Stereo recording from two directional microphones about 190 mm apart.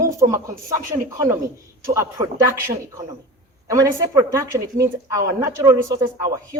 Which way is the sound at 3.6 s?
15° right (ahead or behind).